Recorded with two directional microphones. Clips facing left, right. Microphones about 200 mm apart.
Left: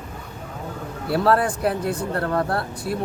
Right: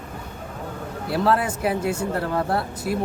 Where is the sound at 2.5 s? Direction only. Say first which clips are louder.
Right 1 dB; 25° right (ahead or behind).